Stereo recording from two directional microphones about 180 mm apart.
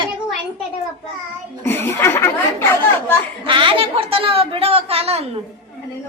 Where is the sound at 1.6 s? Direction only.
10° left (ahead or behind).